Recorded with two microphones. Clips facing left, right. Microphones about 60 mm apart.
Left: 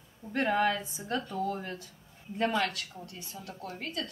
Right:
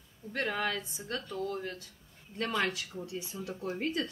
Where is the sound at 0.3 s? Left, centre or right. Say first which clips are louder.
Left 5 dB; centre.